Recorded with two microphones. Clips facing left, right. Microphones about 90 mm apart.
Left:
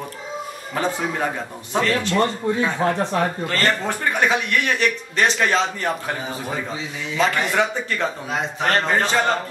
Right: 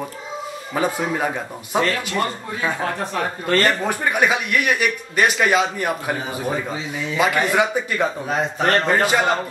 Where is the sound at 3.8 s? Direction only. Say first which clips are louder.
Right 2 dB; 10° right (ahead or behind).